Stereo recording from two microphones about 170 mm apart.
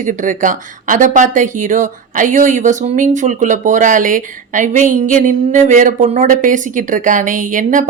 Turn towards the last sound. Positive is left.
turn(degrees=-50)  # may be behind; listen again after turning